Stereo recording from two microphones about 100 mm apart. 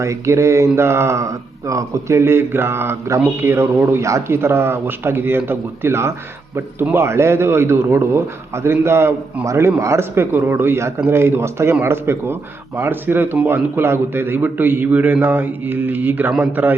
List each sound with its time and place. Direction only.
0.0 s speech: 30° right (ahead or behind)